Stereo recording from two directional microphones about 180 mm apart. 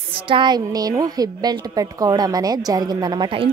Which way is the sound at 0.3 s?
25° right (ahead or behind).